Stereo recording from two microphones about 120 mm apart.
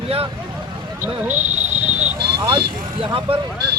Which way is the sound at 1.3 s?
80° right.